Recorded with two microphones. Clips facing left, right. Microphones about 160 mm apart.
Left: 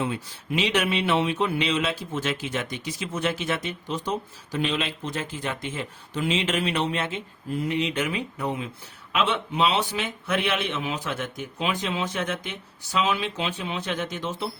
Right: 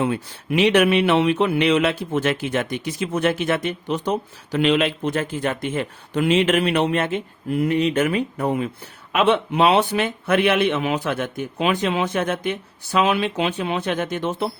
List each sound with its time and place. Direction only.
0.0 s speech: 60° right (ahead or behind)